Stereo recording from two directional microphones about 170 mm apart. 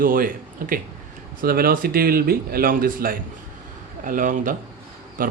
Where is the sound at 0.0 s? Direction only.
55° right (ahead or behind).